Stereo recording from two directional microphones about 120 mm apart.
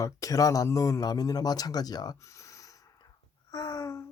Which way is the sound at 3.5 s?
35° left (ahead or behind).